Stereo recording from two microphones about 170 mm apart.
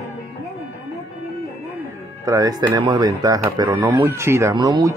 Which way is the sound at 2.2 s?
20° right (ahead or behind).